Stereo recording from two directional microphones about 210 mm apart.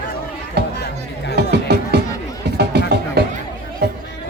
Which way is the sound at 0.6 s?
50° right (ahead or behind).